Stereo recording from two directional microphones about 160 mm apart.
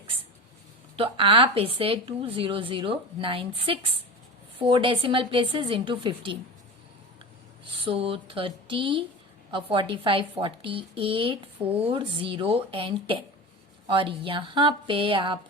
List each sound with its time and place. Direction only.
0.9 s a woman's voice: 35° right (ahead or behind)
7.6 s a woman's voice: 35° right (ahead or behind)